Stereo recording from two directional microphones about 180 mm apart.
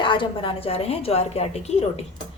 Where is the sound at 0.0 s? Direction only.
25° left (ahead or behind).